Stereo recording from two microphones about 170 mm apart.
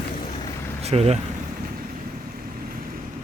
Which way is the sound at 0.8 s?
40° right (ahead or behind).